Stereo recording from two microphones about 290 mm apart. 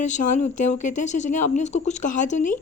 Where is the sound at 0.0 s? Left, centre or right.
Left.